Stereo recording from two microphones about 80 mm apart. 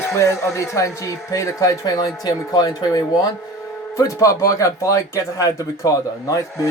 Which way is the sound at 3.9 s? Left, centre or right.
Left.